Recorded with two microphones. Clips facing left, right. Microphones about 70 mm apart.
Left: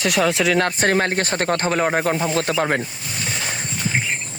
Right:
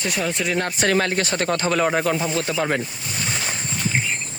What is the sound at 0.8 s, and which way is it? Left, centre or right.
Speech, left.